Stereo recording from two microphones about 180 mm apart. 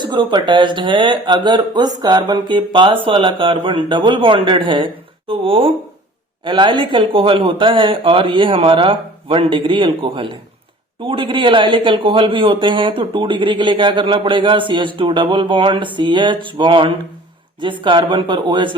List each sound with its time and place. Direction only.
0.0 s a man's voice: 25° right (ahead or behind)